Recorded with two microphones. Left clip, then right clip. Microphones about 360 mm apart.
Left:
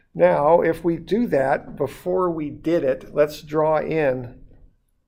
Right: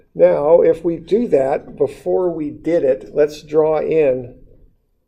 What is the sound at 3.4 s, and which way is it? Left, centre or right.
Speech, left.